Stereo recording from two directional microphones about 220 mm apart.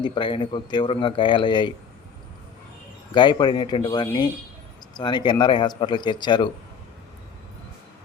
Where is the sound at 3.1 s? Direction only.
20° left (ahead or behind).